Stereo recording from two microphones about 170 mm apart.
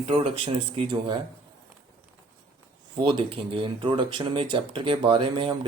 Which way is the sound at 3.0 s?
30° right (ahead or behind).